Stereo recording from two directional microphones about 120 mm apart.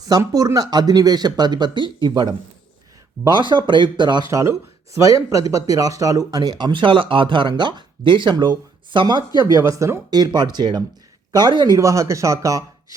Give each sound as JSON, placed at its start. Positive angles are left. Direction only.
{"t": 0.0, "sound": "speech", "side_deg": -30}
{"t": 4.3, "sound": "speech", "side_deg": -25}
{"t": 9.6, "sound": "speech", "side_deg": -25}